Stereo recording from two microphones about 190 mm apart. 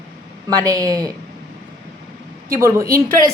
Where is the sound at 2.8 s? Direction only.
50° right (ahead or behind).